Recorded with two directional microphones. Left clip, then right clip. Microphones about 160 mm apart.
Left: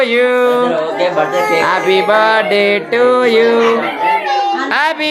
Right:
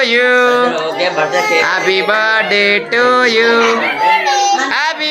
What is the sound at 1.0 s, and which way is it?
Speech, 75° left (ahead or behind).